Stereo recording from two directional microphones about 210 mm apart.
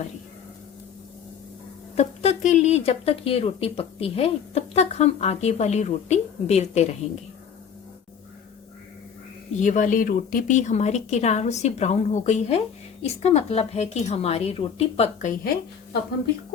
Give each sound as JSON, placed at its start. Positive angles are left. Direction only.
{"t": 2.0, "sound": "speech", "side_deg": 35}
{"t": 9.6, "sound": "a woman's voice", "side_deg": 35}